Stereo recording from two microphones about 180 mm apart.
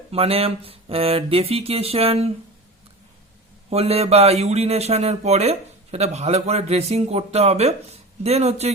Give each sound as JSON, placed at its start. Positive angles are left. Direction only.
{"t": 0.1, "sound": "speech", "side_deg": -35}
{"t": 3.7, "sound": "speech", "side_deg": -35}